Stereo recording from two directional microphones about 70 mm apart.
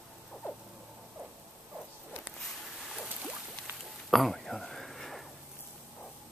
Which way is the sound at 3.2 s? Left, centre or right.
Right.